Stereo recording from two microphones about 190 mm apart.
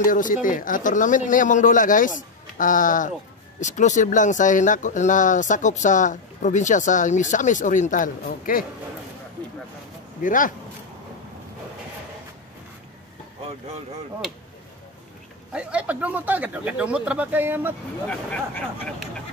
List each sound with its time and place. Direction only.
0.0 s speech: 45° left (ahead or behind)
9.4 s a sound: 10° left (ahead or behind)
10.2 s speech: 45° left (ahead or behind)
15.5 s speech: 5° right (ahead or behind)
18.0 s speech: 5° left (ahead or behind)